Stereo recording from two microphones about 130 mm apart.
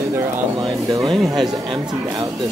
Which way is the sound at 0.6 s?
35° right (ahead or behind).